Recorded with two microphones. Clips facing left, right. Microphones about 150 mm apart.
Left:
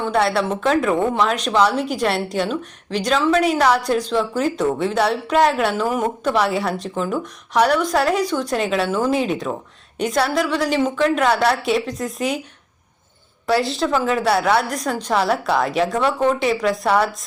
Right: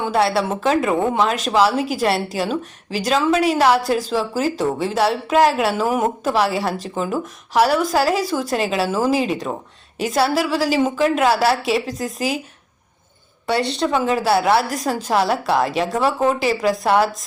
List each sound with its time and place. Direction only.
0.0 s a woman's voice: 5° right (ahead or behind)
13.5 s a woman's voice: centre (ahead or behind)